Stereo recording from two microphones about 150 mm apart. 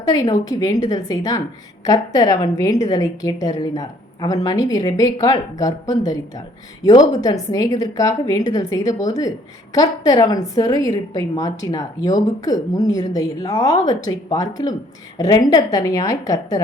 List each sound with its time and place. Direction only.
0.1 s a woman's voice: 25° left (ahead or behind)